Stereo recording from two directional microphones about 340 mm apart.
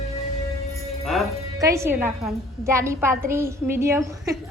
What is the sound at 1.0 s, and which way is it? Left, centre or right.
A woman's voice, centre.